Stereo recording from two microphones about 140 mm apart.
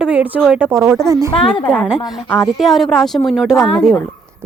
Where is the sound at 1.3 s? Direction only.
40° left (ahead or behind).